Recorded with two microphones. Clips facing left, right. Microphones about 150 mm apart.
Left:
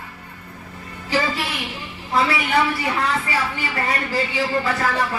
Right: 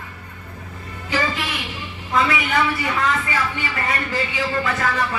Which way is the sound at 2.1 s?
30° left (ahead or behind).